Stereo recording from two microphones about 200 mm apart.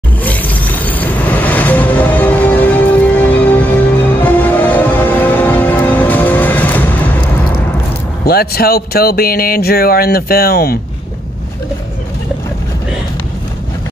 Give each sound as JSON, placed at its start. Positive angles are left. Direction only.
{"t": 0.2, "sound": "vehicle", "side_deg": 10}
{"t": 4.2, "sound": "music", "side_deg": 10}
{"t": 8.3, "sound": "speech", "side_deg": 50}